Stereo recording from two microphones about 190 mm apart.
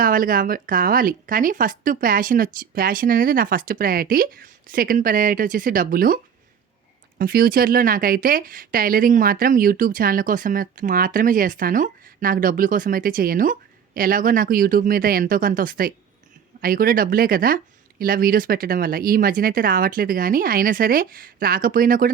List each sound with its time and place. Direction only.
0.0 s speech: 50° right (ahead or behind)
7.2 s speech: 50° right (ahead or behind)